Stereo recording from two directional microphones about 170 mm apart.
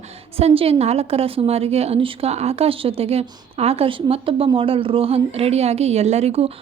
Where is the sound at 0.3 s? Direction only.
35° right (ahead or behind).